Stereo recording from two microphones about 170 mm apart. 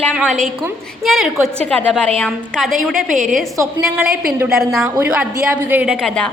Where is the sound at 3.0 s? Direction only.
50° right (ahead or behind).